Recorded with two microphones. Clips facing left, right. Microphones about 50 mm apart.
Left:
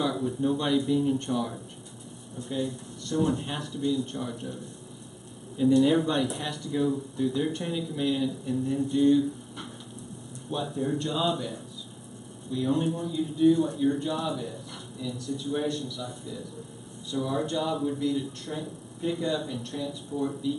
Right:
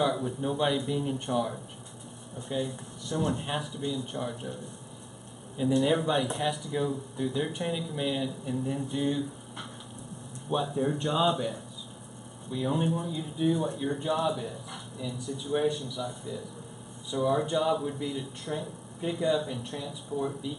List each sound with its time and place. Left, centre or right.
0.0 s speech: centre
5.8 s speech: centre